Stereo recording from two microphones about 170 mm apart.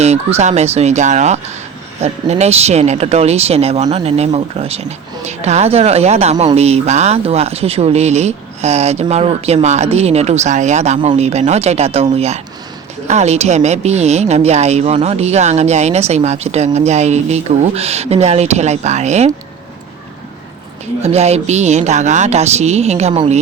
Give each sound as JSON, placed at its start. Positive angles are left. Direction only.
{"t": 0.0, "sound": "a woman's voice", "side_deg": -40}
{"t": 21.0, "sound": "a woman's voice", "side_deg": -40}